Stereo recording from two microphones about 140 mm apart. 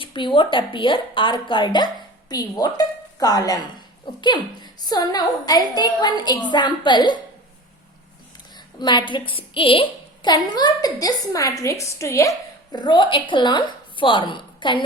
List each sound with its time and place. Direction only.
0.0 s a woman's voice: 35° left (ahead or behind)
8.5 s a woman's voice: 30° left (ahead or behind)
12.7 s a woman's voice: 30° left (ahead or behind)